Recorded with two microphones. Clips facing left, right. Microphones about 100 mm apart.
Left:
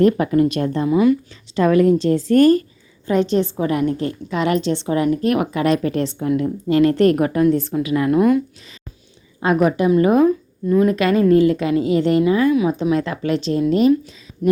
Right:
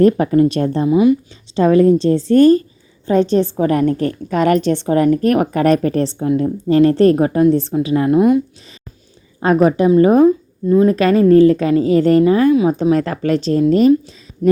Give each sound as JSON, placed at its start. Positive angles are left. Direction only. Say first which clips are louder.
{"t": 0.0, "sound": "a woman's voice", "louder": "right 3 dB", "side_deg": -35}
{"t": 9.4, "sound": "a woman's voice", "louder": "right 4 dB", "side_deg": -35}
{"t": 12.8, "sound": "a woman's voice", "louder": "right 4 dB", "side_deg": -40}
{"t": 14.0, "sound": "a sound", "louder": "right 4 dB", "side_deg": -30}